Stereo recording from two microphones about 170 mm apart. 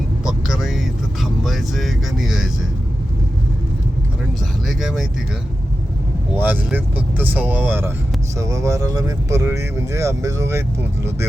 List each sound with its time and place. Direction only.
0.3 s music: centre (ahead or behind)
1.2 s speech: centre (ahead or behind)
4.6 s speech: centre (ahead or behind)
6.3 s speech: 10° right (ahead or behind)